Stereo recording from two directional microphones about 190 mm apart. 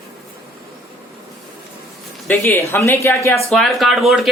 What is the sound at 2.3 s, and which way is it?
Speech, 10° left (ahead or behind).